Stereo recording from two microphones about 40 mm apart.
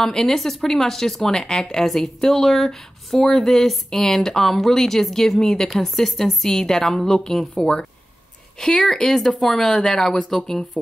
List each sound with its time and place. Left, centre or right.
0.0 s speech: centre
1.9 s speech: centre
7.5 s speech: left
8.5 s speech: centre